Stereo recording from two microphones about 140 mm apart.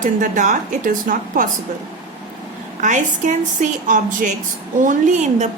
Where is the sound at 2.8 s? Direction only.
60° right (ahead or behind).